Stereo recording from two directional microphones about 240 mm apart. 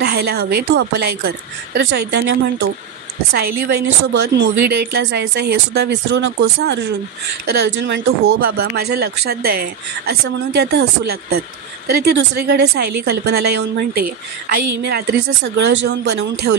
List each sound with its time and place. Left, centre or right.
0.0 s a woman's voice: right
4.0 s a woman's voice: right